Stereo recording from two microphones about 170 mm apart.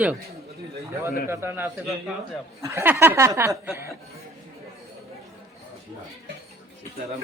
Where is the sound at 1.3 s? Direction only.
15° right (ahead or behind).